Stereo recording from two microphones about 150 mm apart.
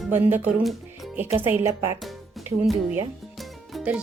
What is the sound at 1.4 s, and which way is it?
Speech, 15° right (ahead or behind).